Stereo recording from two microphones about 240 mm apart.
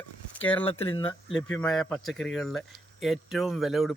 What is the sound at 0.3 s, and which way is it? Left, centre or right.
Speech, centre.